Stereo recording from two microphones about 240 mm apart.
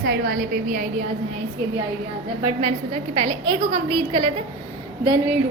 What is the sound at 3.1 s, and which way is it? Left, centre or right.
A woman's voice, right.